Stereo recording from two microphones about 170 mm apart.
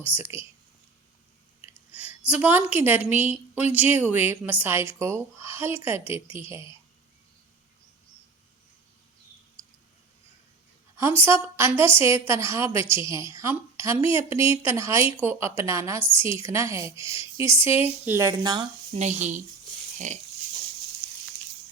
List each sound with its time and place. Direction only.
0.0 s a woman's voice: 10° right (ahead or behind)
1.6 s a sound: 10° right (ahead or behind)
3.1 s a woman's voice: 10° right (ahead or behind)
11.3 s a woman's voice: 15° right (ahead or behind)
18.9 s speech: 40° right (ahead or behind)